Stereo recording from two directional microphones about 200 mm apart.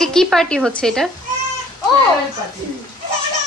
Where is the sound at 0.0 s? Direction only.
5° left (ahead or behind).